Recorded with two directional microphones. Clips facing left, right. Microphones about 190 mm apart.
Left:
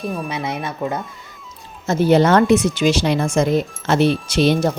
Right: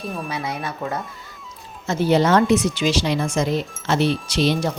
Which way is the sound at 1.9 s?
50° left (ahead or behind).